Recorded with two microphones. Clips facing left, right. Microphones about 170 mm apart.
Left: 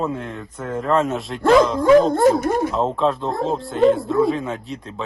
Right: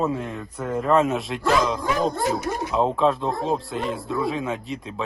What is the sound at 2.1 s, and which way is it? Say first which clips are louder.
Speech: left 9 dB; 50° left (ahead or behind).